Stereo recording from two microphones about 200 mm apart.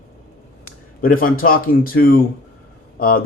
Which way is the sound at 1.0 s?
45° left (ahead or behind).